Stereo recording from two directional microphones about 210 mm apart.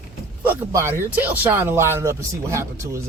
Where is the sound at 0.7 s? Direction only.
15° right (ahead or behind).